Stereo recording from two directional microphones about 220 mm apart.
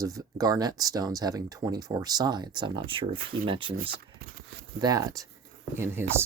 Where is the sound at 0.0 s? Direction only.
15° right (ahead or behind).